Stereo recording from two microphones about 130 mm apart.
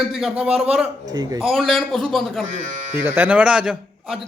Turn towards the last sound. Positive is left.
turn(degrees=-5)  # may be behind; listen again after turning